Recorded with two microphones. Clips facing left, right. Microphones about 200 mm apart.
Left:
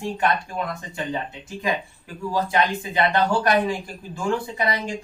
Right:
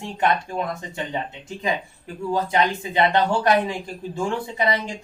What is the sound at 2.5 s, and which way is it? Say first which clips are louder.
A woman's voice: right 1 dB; 25° right (ahead or behind).